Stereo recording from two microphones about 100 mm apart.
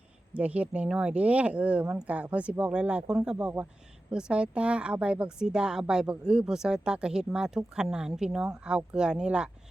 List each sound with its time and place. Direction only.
0.3 s a woman's voice: 15° right (ahead or behind)